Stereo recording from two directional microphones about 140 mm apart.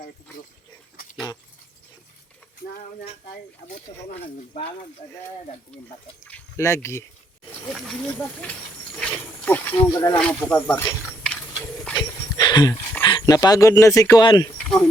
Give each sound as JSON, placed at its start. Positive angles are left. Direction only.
{"t": 5.7, "sound": "speech", "side_deg": 10}
{"t": 7.7, "sound": "speech", "side_deg": 5}
{"t": 9.0, "sound": "a sound", "side_deg": 10}
{"t": 10.2, "sound": "speech", "side_deg": 5}
{"t": 11.9, "sound": "a sound", "side_deg": 30}
{"t": 13.0, "sound": "speech", "side_deg": 30}